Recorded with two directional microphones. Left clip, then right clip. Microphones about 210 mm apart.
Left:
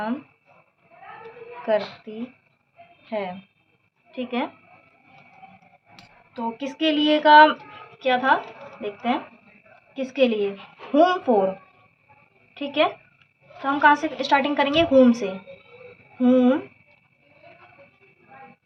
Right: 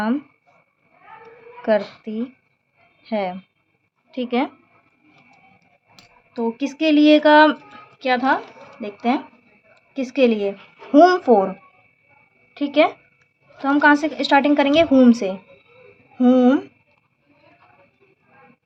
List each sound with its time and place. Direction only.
1.6 s a woman's voice: 50° right (ahead or behind)
6.3 s a woman's voice: 45° right (ahead or behind)
12.5 s a woman's voice: 45° right (ahead or behind)